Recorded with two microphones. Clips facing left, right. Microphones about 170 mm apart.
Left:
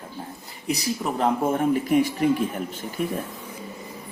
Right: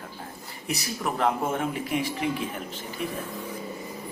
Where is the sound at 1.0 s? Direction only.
35° left (ahead or behind).